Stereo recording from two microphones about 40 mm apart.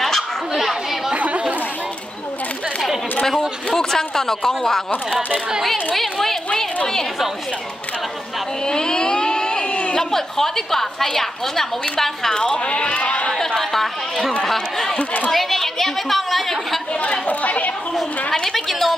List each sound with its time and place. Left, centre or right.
0.6 s chatter: centre
1.1 s chatter: right
3.3 s a woman's voice: centre
8.6 s a sound: centre
9.9 s a woman's voice: centre
12.4 s speech: left
13.3 s a woman's voice: centre
15.0 s speech: left
15.3 s speech: centre
17.3 s speech: left
18.3 s speech: centre
18.7 s a woman's voice: centre